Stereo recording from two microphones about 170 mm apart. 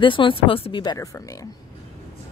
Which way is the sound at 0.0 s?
30° left (ahead or behind).